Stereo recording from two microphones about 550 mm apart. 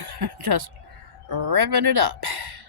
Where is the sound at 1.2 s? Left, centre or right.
Right.